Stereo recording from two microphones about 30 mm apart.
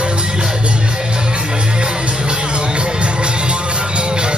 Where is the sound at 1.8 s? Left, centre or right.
Right.